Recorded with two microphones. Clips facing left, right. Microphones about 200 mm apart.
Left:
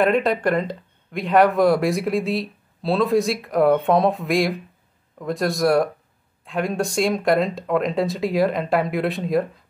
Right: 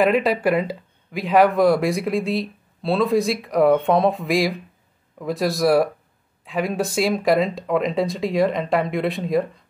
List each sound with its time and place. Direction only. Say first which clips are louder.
0.0 s speech: right 1 dB; centre (ahead or behind)